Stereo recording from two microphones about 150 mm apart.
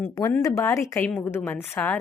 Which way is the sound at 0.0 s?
20° left (ahead or behind).